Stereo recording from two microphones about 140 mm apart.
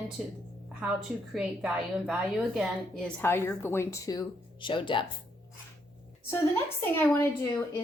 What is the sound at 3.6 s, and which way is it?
Speech, 20° left (ahead or behind).